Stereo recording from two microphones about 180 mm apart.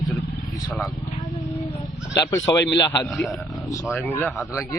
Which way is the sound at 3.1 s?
Centre (ahead or behind).